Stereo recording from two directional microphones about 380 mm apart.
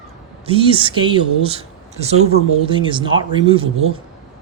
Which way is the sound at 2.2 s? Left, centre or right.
Right.